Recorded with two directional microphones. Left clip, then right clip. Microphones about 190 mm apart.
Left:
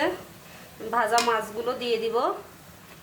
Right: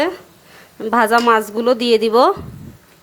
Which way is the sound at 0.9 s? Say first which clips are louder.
Right 10 dB; 55° right (ahead or behind).